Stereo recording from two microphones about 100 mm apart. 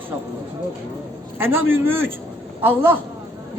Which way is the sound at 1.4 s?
20° right (ahead or behind).